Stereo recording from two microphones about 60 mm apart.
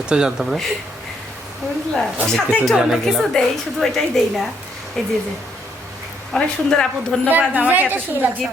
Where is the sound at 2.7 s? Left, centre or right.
Centre.